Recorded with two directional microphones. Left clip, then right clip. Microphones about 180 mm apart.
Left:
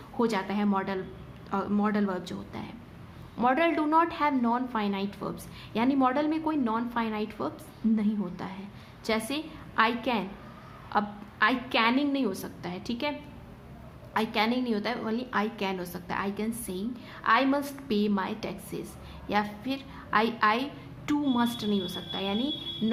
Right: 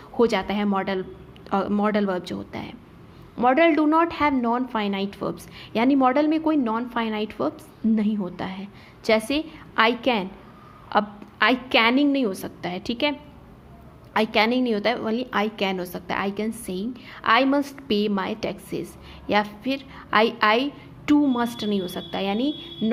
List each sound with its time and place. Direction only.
0.2 s a woman's voice: 35° right (ahead or behind)
22.8 s music: 25° right (ahead or behind)